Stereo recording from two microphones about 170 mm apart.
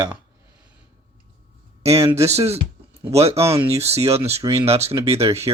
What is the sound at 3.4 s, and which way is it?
Speech, 15° right (ahead or behind).